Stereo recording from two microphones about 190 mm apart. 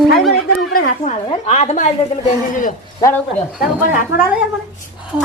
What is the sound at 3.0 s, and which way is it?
Speech, 15° left (ahead or behind).